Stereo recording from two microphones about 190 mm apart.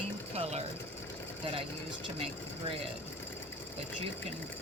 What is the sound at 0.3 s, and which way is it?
Speech, 35° right (ahead or behind).